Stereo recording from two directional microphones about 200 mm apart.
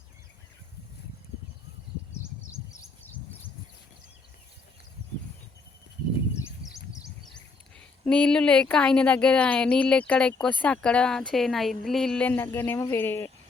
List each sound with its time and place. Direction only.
2.1 s bird: 15° left (ahead or behind)
8.0 s speech: 5° left (ahead or behind)